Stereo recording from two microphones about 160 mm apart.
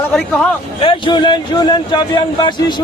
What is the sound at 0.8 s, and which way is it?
A man's voice, 30° left (ahead or behind).